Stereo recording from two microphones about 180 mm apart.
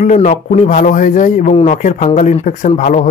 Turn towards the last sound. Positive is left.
turn(degrees=40)  # may be behind; listen again after turning